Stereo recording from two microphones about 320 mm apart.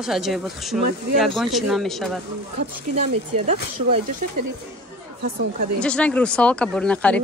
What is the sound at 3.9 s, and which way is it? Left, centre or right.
Speech, right.